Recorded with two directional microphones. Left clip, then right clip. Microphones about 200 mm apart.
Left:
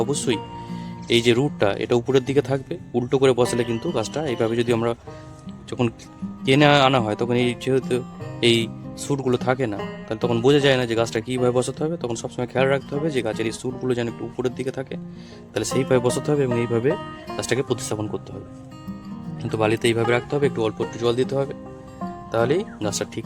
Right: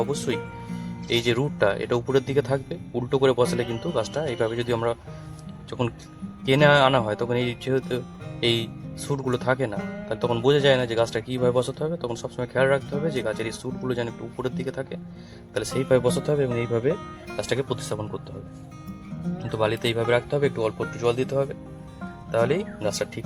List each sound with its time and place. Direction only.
0.0 s speech: 55° left (ahead or behind)
19.4 s speech: 50° left (ahead or behind)